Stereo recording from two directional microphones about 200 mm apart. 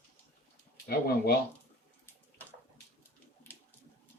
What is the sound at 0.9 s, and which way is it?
Speech, 50° left (ahead or behind).